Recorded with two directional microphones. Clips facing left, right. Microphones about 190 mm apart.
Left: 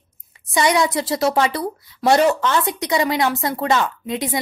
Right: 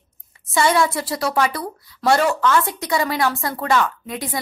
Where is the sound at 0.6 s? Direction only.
15° left (ahead or behind).